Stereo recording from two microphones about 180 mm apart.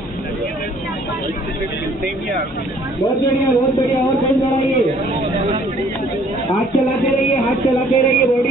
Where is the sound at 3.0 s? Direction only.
15° left (ahead or behind).